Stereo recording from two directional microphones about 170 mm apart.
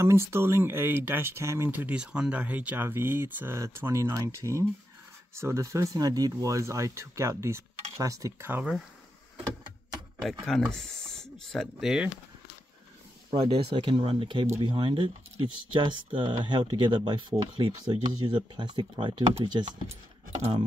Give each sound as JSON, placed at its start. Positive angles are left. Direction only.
{"t": 0.0, "sound": "speech", "side_deg": -15}
{"t": 10.4, "sound": "speech", "side_deg": 5}
{"t": 13.3, "sound": "speech", "side_deg": -40}